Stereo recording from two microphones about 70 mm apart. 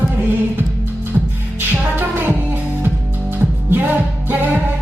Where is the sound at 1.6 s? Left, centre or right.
Right.